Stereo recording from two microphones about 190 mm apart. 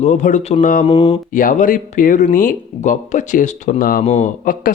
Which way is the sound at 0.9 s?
30° left (ahead or behind).